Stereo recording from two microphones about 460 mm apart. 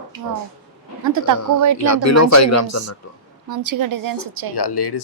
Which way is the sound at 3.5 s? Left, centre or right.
Right.